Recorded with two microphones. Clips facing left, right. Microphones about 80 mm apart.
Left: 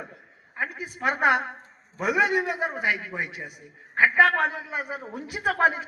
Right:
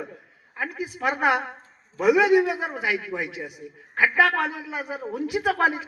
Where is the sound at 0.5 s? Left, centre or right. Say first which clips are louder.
Even; centre.